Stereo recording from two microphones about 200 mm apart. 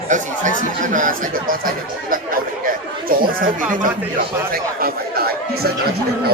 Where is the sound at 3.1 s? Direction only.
45° right (ahead or behind).